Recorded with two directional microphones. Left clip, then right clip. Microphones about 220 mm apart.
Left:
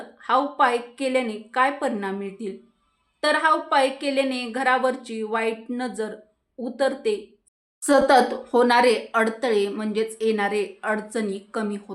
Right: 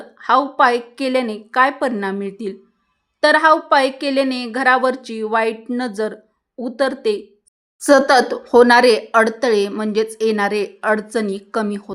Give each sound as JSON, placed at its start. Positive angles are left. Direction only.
{"t": 0.2, "sound": "a woman's voice", "side_deg": -40}